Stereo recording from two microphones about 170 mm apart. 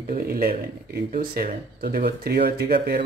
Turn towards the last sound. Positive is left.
turn(degrees=-65)  # may be behind; listen again after turning